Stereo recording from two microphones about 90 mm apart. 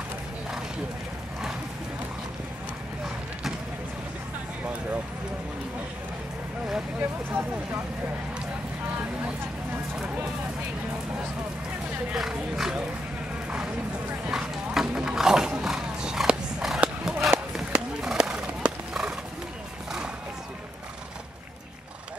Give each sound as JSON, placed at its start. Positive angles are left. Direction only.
{"t": 7.0, "sound": "speech", "side_deg": -25}
{"t": 9.9, "sound": "speech", "side_deg": -15}
{"t": 12.1, "sound": "speech", "side_deg": -5}
{"t": 13.5, "sound": "music", "side_deg": -15}
{"t": 14.3, "sound": "clip-clop", "side_deg": -5}
{"t": 14.9, "sound": "roaring cats", "side_deg": -10}
{"t": 16.8, "sound": "a sound", "side_deg": -5}
{"t": 17.6, "sound": "horse", "side_deg": -5}